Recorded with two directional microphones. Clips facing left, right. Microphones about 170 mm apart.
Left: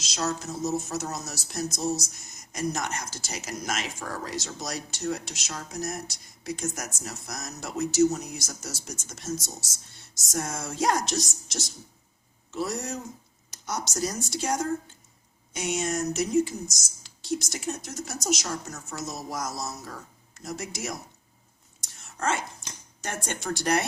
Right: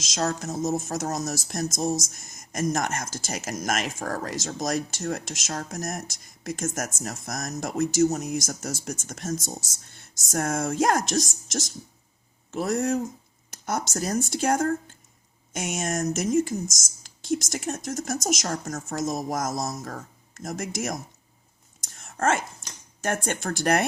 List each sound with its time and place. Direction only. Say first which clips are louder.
0.0 s speech: right 3 dB; 50° right (ahead or behind)
21.8 s whispering: right 6 dB; 50° right (ahead or behind)
23.0 s speech: right 7 dB; 50° right (ahead or behind)